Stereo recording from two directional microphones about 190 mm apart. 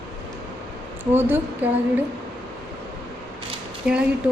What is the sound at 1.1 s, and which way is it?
Speech, 10° right (ahead or behind).